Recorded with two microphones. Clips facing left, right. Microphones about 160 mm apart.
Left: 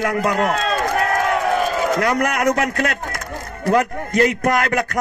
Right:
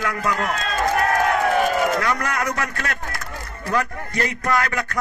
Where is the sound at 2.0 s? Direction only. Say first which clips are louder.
Left 5 dB; 45° left (ahead or behind).